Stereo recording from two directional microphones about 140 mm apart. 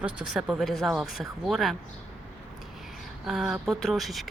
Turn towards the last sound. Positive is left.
turn(degrees=0)  # may be behind; listen again after turning